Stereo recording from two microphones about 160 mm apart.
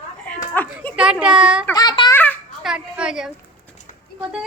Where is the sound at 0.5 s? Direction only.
10° left (ahead or behind).